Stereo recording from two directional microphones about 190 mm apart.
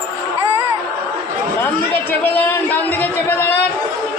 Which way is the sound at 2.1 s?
10° left (ahead or behind).